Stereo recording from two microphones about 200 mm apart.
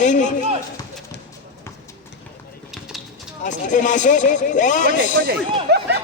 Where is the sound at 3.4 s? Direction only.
40° left (ahead or behind).